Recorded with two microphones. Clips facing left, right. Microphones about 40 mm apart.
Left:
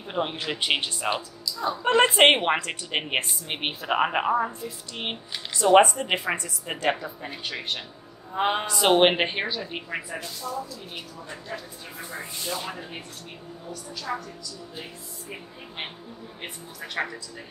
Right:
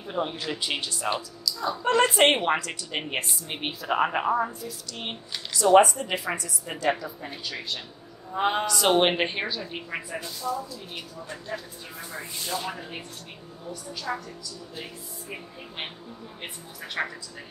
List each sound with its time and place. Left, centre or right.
0.1 s a woman's voice: left
2.6 s a woman's voice: left; by 4.5 s centre
4.5 s speech: left
8.3 s a woman's voice: centre
12.6 s speech: centre
14.1 s speech: centre
16.8 s speech: centre